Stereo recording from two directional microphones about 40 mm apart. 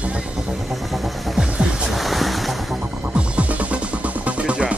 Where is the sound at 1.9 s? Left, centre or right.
Centre.